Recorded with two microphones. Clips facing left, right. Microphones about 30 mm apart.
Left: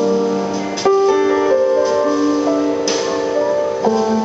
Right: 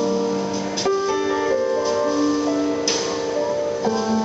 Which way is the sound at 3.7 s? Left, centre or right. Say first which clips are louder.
Left 5 dB; centre.